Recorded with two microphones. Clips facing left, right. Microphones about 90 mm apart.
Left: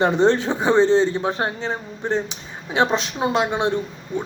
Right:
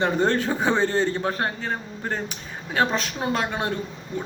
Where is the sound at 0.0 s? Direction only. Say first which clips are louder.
Left 5 dB; 20° left (ahead or behind).